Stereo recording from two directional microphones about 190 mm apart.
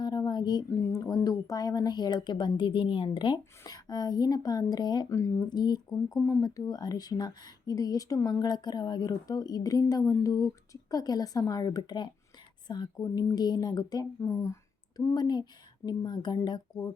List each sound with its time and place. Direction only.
0.0 s speech: 20° left (ahead or behind)
6.1 s speech: 5° left (ahead or behind)
6.4 s speech: 20° left (ahead or behind)